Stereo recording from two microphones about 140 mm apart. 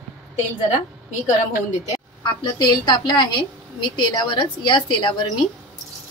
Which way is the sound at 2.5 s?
30° left (ahead or behind).